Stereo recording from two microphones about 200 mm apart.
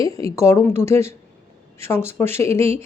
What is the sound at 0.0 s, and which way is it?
A woman's voice, 15° left (ahead or behind).